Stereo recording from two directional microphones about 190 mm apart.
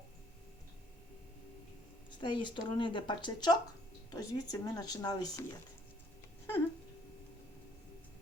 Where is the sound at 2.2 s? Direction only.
25° left (ahead or behind).